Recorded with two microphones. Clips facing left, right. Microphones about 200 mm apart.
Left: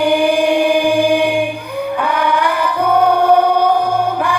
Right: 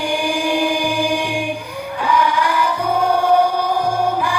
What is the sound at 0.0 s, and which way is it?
Choir, 60° left (ahead or behind).